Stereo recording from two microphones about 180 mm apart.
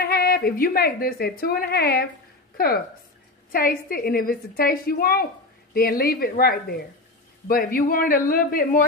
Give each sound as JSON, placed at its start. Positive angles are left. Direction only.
{"t": 0.0, "sound": "a woman's voice", "side_deg": 60}